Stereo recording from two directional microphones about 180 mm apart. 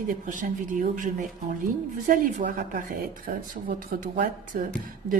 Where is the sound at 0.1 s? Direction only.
45° right (ahead or behind).